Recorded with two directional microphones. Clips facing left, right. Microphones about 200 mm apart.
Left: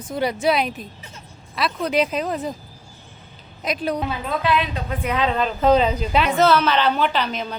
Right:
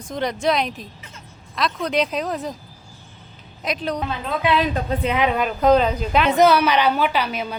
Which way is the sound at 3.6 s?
5° left (ahead or behind).